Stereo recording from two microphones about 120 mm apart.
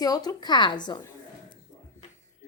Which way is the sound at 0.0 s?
35° left (ahead or behind).